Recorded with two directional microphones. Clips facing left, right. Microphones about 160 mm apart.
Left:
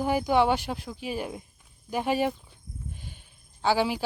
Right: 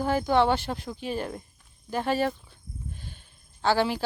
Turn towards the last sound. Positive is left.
turn(degrees=10)  # may be behind; listen again after turning